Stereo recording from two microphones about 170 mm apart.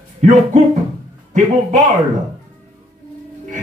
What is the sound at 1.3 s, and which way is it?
Speech, 45° right (ahead or behind).